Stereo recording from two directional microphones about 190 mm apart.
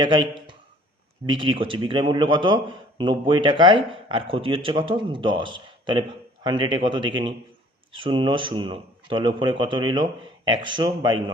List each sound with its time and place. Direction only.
0.0 s a man's voice: 25° right (ahead or behind)